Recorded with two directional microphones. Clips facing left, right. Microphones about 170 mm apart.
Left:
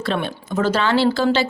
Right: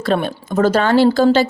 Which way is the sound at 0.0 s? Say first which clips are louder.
Right 5 dB; 45° right (ahead or behind).